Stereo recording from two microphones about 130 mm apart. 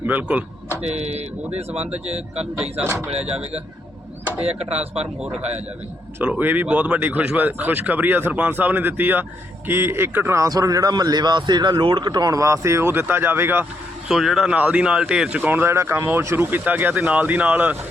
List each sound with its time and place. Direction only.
0.0 s a sound: 15° right (ahead or behind)
0.8 s speech: 55° right (ahead or behind)
4.4 s speech: 50° right (ahead or behind)
6.1 s a man's voice: 10° right (ahead or behind)
14.1 s speech: 5° right (ahead or behind)